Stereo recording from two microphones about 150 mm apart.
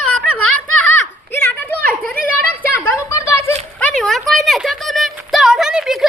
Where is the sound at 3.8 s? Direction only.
5° left (ahead or behind).